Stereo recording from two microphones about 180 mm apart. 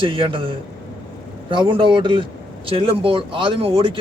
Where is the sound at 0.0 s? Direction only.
30° right (ahead or behind).